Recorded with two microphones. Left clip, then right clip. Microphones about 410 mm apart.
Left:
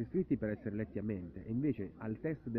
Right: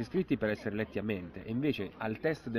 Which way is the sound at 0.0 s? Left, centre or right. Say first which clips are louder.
Right 4 dB; right.